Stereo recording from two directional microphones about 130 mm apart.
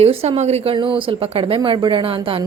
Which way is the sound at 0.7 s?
40° right (ahead or behind).